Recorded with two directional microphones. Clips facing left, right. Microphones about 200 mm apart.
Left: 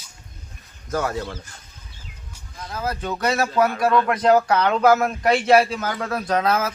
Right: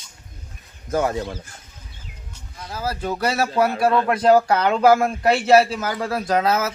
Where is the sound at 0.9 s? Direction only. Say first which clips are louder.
Right 3 dB; 20° right (ahead or behind).